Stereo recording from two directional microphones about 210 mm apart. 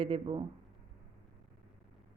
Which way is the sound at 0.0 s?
25° right (ahead or behind).